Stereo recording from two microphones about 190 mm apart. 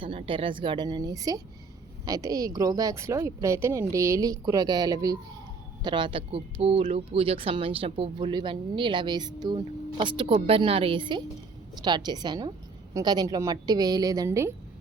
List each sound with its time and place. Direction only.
0.0 s speech: 30° right (ahead or behind)